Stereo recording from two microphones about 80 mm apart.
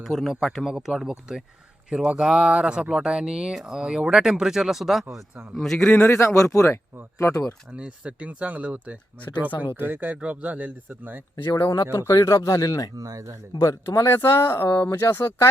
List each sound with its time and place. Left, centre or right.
0.0 s a man's voice: centre
6.1 s speech: left
7.7 s speech: centre
11.5 s speech: left
13.0 s speech: right
13.6 s speech: left